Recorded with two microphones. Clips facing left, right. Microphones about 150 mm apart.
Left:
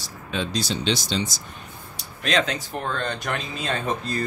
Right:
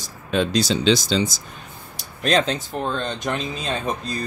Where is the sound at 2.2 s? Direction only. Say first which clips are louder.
Right 4 dB; 35° right (ahead or behind); by 4.2 s 15° right (ahead or behind).